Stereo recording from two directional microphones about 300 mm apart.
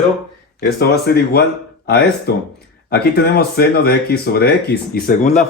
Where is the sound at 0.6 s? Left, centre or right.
Left.